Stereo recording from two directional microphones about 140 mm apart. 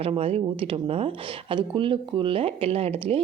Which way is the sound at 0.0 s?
45° right (ahead or behind).